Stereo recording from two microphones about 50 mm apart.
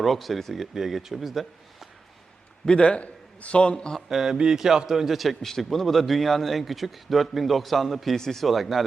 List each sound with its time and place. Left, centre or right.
0.0 s a man's voice: centre
2.6 s a man's voice: left
3.9 s a man's voice: centre